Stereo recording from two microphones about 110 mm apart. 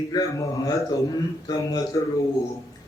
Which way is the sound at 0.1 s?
30° left (ahead or behind).